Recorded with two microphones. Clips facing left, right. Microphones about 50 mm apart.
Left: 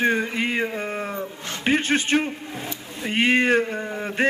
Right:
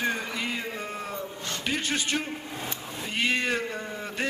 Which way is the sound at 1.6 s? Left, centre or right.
Left.